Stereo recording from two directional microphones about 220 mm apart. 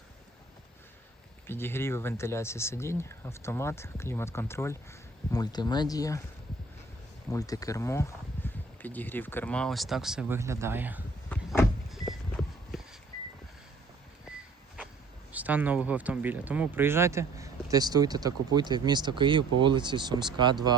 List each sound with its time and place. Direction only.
1.5 s speech: 10° left (ahead or behind)
7.3 s speech: 15° left (ahead or behind); by 11.0 s 10° right (ahead or behind)
11.3 s vehicle: 5° left (ahead or behind)
15.3 s speech: 5° right (ahead or behind)